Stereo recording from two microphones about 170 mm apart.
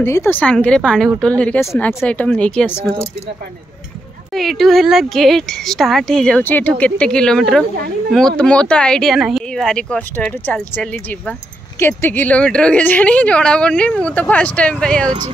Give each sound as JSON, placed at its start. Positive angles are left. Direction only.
{"t": 0.0, "sound": "speech", "side_deg": 15}
{"t": 4.3, "sound": "speech", "side_deg": 0}